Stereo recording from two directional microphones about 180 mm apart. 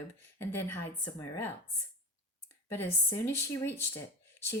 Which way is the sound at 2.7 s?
15° left (ahead or behind).